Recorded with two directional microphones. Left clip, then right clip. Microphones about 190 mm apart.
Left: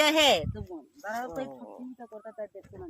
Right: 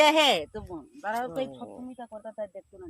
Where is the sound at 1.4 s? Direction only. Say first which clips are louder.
Right 4 dB; 20° right (ahead or behind).